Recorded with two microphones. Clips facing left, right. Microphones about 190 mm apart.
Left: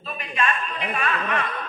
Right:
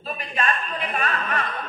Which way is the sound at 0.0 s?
40° right (ahead or behind).